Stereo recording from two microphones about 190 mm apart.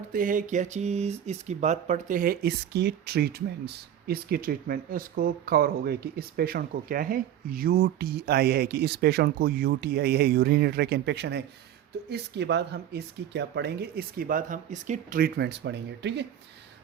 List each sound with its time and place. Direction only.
0.1 s speech: 45° right (ahead or behind); by 16.2 s 65° right (ahead or behind)